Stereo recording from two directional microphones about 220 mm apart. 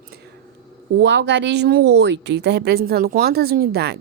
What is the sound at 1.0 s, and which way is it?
Speech, 50° right (ahead or behind).